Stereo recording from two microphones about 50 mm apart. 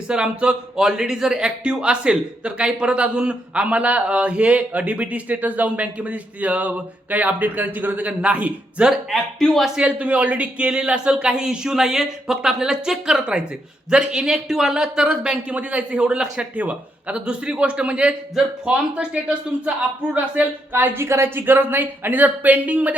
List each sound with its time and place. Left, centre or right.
0.1 s a man's voice: right
8.8 s a man's voice: centre
9.7 s speech: right
15.5 s a man's voice: right
16.6 s a man's voice: right
17.2 s a man's voice: centre
20.1 s speech: right